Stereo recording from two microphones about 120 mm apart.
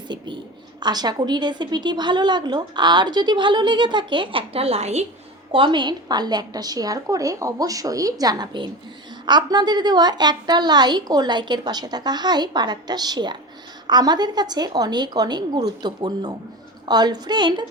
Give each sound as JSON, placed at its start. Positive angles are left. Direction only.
{"t": 0.8, "sound": "a woman's voice", "side_deg": -35}
{"t": 5.5, "sound": "a woman's voice", "side_deg": -45}